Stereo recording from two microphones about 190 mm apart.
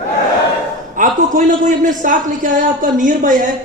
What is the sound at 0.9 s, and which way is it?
A man's voice, 45° right (ahead or behind).